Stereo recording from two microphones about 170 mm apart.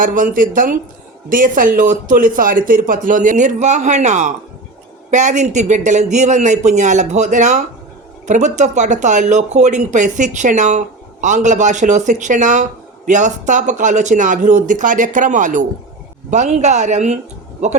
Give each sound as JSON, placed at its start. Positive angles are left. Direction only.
{"t": 0.0, "sound": "speech", "side_deg": -50}